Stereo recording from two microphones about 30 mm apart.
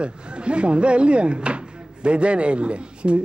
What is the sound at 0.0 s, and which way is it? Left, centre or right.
Speech, right.